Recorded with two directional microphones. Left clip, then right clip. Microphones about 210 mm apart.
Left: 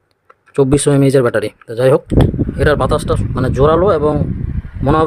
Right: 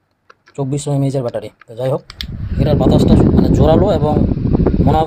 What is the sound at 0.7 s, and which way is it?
Speech, 45° left (ahead or behind).